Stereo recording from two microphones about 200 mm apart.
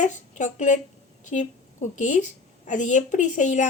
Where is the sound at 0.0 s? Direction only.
35° left (ahead or behind).